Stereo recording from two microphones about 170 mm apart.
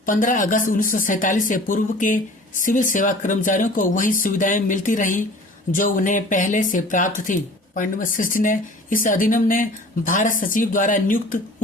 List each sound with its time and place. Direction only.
0.0 s speech: 50° left (ahead or behind)